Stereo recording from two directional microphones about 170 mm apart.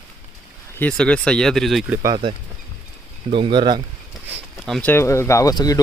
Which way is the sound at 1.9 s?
20° right (ahead or behind).